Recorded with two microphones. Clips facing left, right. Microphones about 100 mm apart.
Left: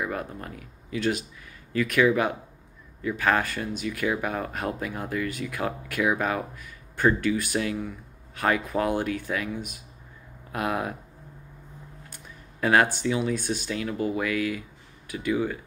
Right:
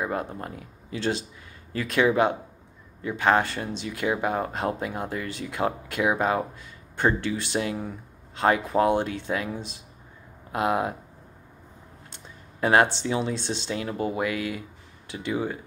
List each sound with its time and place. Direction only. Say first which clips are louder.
0.0 s speech: right 2 dB; 25° right (ahead or behind)
12.1 s speech: even; 25° right (ahead or behind)